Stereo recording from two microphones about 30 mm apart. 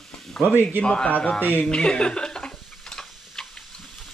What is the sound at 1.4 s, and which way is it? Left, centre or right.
Speech, left.